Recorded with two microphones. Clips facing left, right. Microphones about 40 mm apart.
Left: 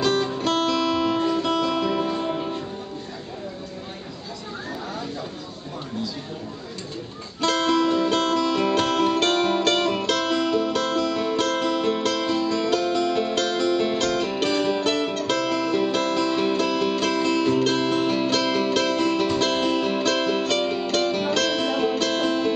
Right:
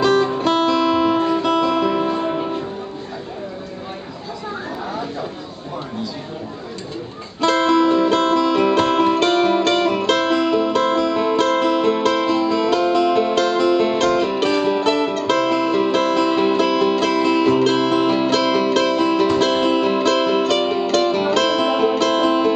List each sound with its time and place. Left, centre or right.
0.0 s music: centre
7.4 s music: centre
21.6 s music: centre